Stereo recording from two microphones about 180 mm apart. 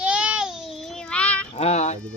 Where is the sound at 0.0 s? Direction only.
5° right (ahead or behind).